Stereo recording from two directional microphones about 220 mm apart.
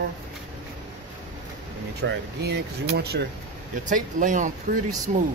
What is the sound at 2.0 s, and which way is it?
Speech, 50° right (ahead or behind).